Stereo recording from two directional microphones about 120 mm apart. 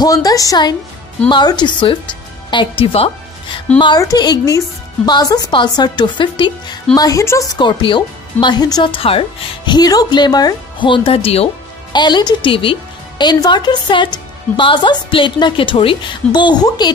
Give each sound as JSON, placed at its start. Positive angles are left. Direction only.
{"t": 0.0, "sound": "a woman's voice", "side_deg": 30}
{"t": 3.7, "sound": "a woman's voice", "side_deg": 40}
{"t": 7.0, "sound": "a woman's voice", "side_deg": 25}
{"t": 7.5, "sound": "a woman's voice", "side_deg": 40}
{"t": 8.9, "sound": "a woman's voice", "side_deg": 50}
{"t": 9.7, "sound": "a woman's voice", "side_deg": 35}
{"t": 11.9, "sound": "a woman's voice", "side_deg": 40}